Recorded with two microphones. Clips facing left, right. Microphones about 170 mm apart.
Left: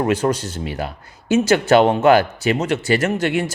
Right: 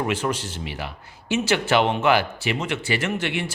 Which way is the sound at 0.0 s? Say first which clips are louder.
Left 6 dB; 45° left (ahead or behind).